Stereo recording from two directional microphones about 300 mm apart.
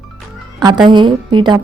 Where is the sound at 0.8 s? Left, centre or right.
Centre.